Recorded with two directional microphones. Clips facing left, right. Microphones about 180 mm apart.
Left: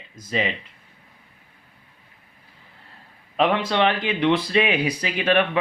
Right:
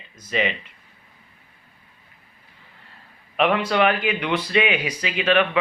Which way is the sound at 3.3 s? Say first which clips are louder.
Right 1 dB; 30° left (ahead or behind).